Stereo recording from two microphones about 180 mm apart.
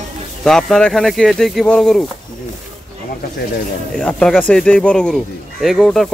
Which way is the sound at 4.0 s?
5° left (ahead or behind).